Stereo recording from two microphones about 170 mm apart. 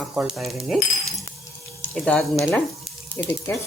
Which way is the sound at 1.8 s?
10° left (ahead or behind).